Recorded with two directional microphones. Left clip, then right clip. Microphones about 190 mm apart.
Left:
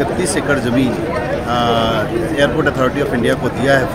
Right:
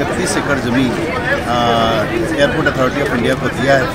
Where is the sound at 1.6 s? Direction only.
5° left (ahead or behind).